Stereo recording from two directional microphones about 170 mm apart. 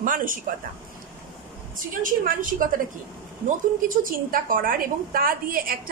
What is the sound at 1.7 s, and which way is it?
Speech, 55° right (ahead or behind).